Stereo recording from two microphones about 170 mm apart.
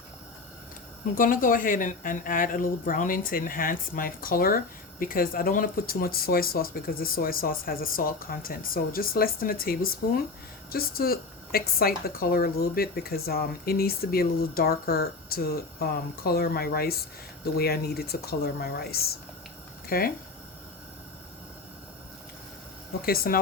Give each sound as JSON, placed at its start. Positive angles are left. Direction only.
{"t": 1.1, "sound": "speech", "side_deg": 55}
{"t": 23.0, "sound": "speech", "side_deg": 60}